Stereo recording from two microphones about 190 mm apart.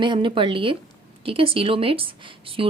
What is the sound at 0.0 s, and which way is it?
Speech, 25° right (ahead or behind).